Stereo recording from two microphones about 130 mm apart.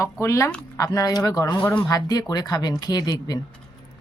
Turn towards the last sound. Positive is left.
turn(degrees=30)  # may be behind; listen again after turning